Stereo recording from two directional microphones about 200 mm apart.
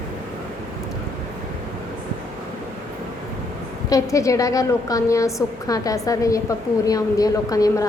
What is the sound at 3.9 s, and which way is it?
A woman's voice, 15° left (ahead or behind).